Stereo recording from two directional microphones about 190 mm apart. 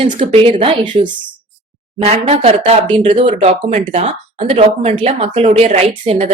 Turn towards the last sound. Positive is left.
turn(degrees=-30)  # may be behind; listen again after turning